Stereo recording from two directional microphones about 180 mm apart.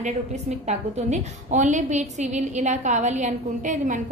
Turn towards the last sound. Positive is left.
turn(degrees=-45)  # may be behind; listen again after turning